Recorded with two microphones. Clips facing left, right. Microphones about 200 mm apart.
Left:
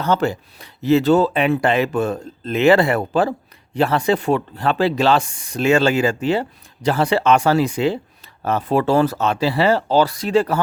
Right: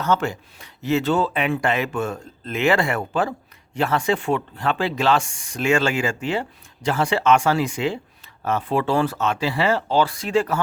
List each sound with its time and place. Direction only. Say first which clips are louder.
0.0 s speech: left 3 dB; 35° left (ahead or behind)